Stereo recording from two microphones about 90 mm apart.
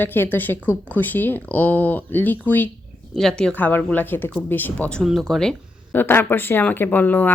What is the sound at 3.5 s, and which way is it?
Speech, 20° left (ahead or behind).